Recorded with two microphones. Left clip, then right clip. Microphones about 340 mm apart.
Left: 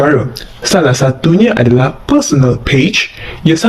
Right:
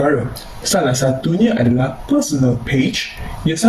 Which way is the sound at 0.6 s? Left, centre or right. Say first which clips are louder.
Left 6 dB; left.